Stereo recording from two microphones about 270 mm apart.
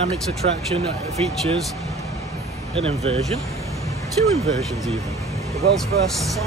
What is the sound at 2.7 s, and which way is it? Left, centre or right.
Speech, right.